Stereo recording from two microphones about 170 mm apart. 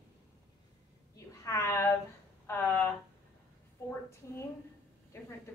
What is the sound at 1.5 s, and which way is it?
A woman's voice, 20° left (ahead or behind).